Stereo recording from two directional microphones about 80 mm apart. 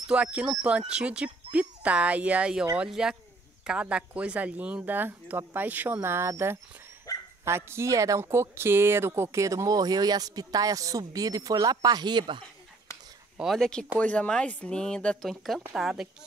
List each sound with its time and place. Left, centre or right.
0.1 s speech: centre
6.0 s speech: right
7.1 s dog: left
7.4 s speech: right
13.6 s speech: centre
15.2 s speech: centre